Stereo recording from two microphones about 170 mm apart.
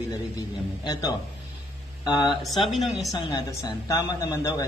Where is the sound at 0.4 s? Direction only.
20° left (ahead or behind).